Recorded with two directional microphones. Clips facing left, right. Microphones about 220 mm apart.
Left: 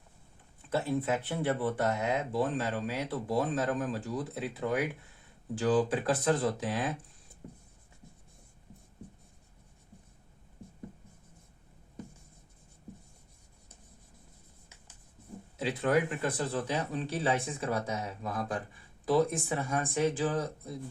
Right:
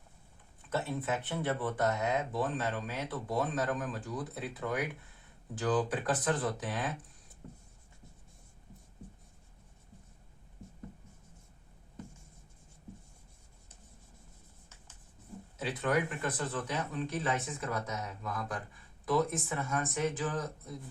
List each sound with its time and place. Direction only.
0.7 s speech: 30° left (ahead or behind)
15.5 s speech: 30° left (ahead or behind)